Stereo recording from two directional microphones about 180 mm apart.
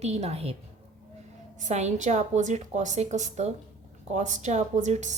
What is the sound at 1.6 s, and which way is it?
Speech, 40° right (ahead or behind).